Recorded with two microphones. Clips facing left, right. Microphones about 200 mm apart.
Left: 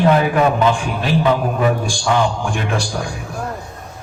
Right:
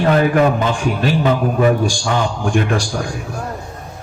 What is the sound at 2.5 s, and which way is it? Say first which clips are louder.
Speech: right 4 dB; 50° right (ahead or behind).